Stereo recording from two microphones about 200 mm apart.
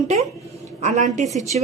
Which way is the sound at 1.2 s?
15° left (ahead or behind).